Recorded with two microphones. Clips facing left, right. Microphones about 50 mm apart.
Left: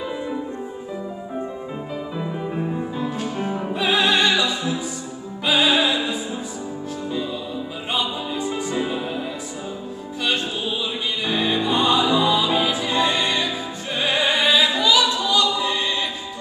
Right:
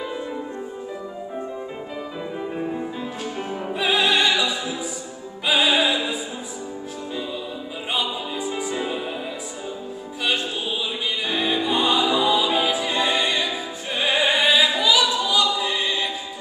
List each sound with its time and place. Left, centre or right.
2.5 s music: centre
5.5 s opera: centre
7.9 s music: centre
11.2 s music: centre